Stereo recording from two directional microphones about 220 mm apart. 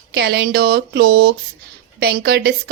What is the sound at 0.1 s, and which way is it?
A woman's voice, 50° right (ahead or behind).